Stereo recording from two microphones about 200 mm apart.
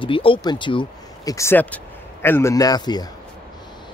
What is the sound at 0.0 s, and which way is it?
Speech, 25° left (ahead or behind).